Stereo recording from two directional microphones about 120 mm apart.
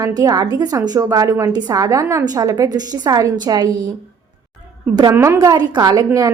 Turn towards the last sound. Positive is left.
turn(degrees=-30)  # may be behind; listen again after turning